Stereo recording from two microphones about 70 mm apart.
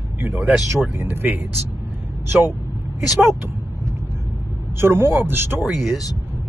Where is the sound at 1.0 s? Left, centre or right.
Right.